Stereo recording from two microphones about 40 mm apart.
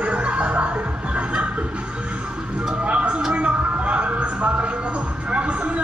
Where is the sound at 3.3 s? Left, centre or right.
Right.